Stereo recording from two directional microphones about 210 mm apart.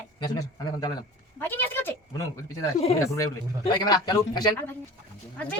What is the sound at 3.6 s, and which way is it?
A man's voice, 20° left (ahead or behind).